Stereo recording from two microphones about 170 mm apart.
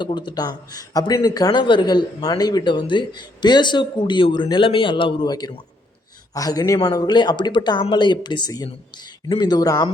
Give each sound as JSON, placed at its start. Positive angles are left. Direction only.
{"t": 0.0, "sound": "a man's voice", "side_deg": 25}